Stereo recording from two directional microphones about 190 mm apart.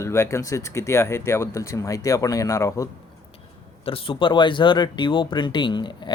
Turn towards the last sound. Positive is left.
turn(degrees=25)  # may be behind; listen again after turning